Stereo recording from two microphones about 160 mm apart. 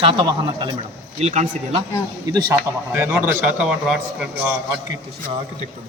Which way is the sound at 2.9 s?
15° right (ahead or behind).